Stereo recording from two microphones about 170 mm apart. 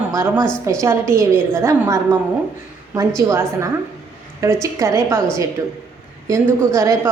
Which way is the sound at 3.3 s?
15° right (ahead or behind).